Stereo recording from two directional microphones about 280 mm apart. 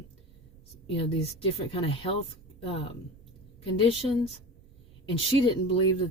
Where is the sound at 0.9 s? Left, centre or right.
Centre.